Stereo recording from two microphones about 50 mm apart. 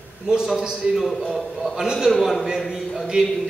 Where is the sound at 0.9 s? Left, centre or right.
Centre.